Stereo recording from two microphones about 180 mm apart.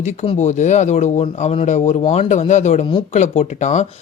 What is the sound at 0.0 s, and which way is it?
Speech, 40° left (ahead or behind).